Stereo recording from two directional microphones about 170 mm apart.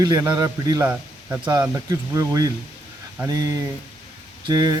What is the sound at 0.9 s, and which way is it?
Speech, 10° right (ahead or behind).